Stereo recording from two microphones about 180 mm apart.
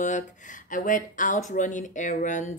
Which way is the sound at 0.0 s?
45° left (ahead or behind).